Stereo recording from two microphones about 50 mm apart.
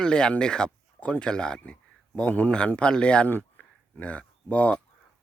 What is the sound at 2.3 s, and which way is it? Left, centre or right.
Speech, left.